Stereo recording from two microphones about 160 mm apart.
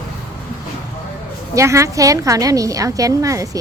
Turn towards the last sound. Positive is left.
turn(degrees=-20)  # may be behind; listen again after turning